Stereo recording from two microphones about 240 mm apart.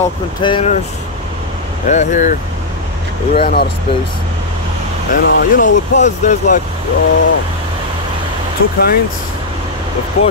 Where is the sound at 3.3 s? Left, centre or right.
Left.